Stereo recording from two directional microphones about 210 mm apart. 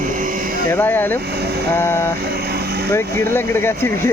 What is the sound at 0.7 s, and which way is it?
Speech, 10° left (ahead or behind).